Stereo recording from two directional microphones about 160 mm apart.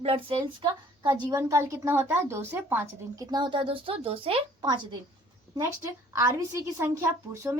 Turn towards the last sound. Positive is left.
turn(degrees=-15)  # may be behind; listen again after turning